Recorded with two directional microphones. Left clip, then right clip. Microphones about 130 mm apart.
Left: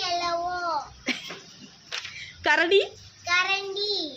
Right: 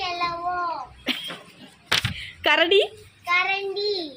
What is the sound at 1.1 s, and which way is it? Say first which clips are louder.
Music: right 4 dB; 15° left (ahead or behind).